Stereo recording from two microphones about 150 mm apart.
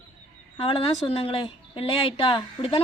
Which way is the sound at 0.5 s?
35° left (ahead or behind).